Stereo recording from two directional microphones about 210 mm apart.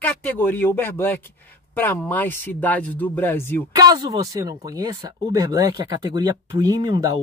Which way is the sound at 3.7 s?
20° right (ahead or behind).